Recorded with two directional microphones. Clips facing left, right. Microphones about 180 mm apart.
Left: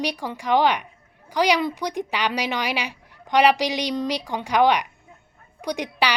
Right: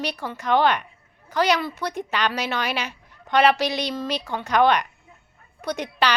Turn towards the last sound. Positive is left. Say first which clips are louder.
# even
turn(degrees=15)  # may be behind; listen again after turning